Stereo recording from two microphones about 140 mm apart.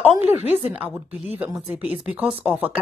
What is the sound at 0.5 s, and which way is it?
Speech, 10° right (ahead or behind).